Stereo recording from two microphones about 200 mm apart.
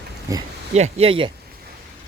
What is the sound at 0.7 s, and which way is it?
Speech, 35° right (ahead or behind).